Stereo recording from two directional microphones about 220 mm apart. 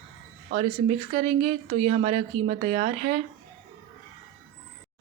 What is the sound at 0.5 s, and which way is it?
Speech, 30° right (ahead or behind).